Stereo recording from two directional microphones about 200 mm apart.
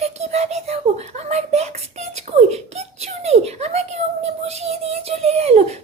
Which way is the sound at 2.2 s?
35° right (ahead or behind).